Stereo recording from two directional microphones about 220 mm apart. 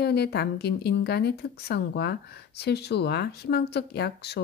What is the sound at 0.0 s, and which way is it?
Speech, 50° left (ahead or behind).